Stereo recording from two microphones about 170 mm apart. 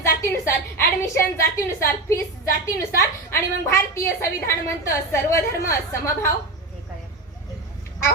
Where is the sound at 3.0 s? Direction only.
15° left (ahead or behind).